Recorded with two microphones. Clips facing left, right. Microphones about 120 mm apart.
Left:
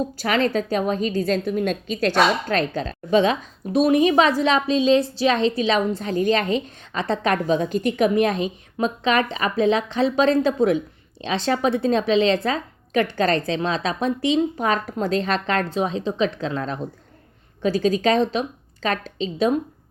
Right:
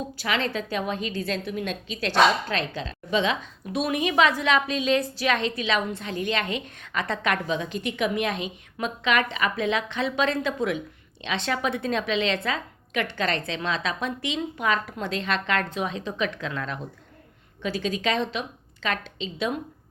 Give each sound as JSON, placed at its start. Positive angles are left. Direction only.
{"t": 0.2, "sound": "a woman's voice", "side_deg": 45}